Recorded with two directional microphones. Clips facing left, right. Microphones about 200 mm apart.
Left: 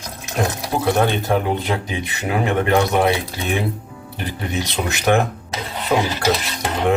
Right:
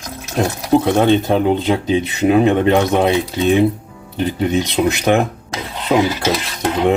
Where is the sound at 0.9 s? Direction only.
20° right (ahead or behind).